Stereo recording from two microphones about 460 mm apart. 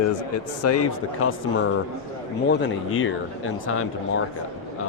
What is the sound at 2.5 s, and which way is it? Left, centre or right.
Speech, left.